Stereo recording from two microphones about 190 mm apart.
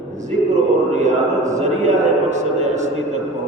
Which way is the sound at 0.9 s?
40° right (ahead or behind).